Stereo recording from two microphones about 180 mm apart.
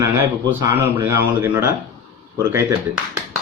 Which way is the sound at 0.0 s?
15° right (ahead or behind).